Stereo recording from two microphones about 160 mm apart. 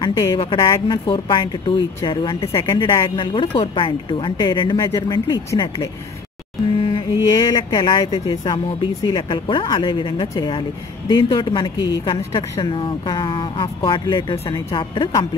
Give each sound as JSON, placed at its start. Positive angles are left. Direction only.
{"t": 0.0, "sound": "speech", "side_deg": 25}